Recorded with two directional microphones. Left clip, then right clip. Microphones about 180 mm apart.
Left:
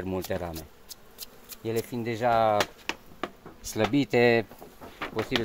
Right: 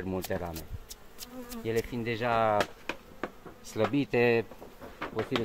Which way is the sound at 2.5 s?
10° left (ahead or behind).